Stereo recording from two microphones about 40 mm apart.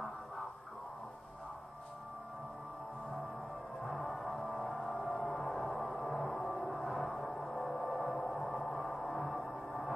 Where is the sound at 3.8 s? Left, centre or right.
Centre.